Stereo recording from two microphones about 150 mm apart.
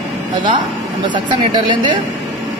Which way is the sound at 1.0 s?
35° right (ahead or behind).